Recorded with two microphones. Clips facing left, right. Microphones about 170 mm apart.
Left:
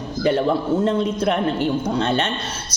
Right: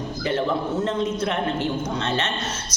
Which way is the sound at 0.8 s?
35° left (ahead or behind).